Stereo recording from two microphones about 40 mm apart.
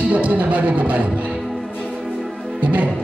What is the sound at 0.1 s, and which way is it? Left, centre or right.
Speech, right.